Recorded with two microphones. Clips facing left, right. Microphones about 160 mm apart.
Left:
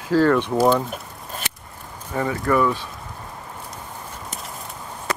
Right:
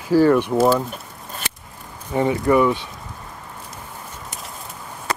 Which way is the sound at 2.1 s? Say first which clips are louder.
Right 4 dB; 20° right (ahead or behind).